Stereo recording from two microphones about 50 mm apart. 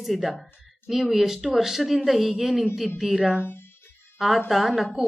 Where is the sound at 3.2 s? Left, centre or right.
Centre.